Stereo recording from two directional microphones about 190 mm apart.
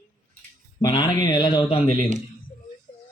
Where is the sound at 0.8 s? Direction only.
20° left (ahead or behind).